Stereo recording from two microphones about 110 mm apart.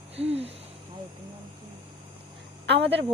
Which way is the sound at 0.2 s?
65° right (ahead or behind).